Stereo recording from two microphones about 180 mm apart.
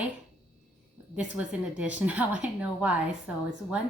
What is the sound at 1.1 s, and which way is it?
A woman's voice, 5° right (ahead or behind).